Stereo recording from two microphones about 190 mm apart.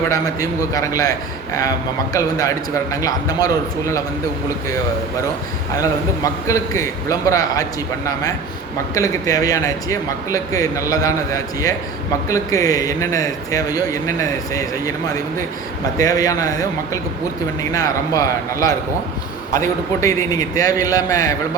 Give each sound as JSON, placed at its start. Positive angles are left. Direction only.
{"t": 0.1, "sound": "a man's voice", "side_deg": 15}
{"t": 2.9, "sound": "a man's voice", "side_deg": 20}
{"t": 5.8, "sound": "a man's voice", "side_deg": 15}